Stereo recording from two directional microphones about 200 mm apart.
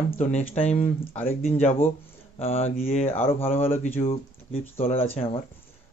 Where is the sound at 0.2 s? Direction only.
30° left (ahead or behind).